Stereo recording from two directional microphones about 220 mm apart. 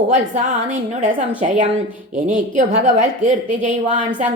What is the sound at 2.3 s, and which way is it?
A woman's voice, 35° right (ahead or behind).